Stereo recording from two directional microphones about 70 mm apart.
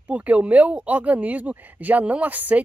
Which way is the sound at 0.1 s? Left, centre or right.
Right.